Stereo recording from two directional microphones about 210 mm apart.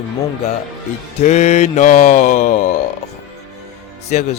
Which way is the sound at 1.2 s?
35° left (ahead or behind).